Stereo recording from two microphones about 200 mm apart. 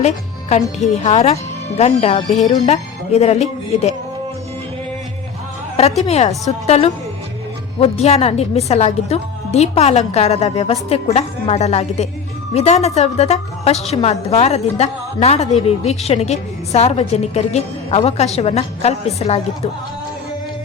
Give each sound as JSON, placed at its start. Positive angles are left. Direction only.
{"t": 0.0, "sound": "a woman's voice", "side_deg": 35}
{"t": 6.1, "sound": "a woman's voice", "side_deg": 30}